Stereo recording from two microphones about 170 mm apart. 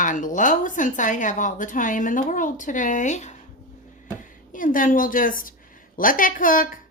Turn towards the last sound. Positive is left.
turn(degrees=55)  # may be behind; listen again after turning